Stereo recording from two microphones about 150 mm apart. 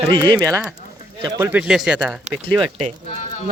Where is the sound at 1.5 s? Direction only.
5° right (ahead or behind).